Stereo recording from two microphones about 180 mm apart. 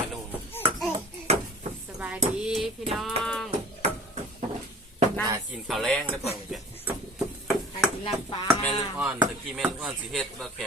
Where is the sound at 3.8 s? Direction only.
35° right (ahead or behind).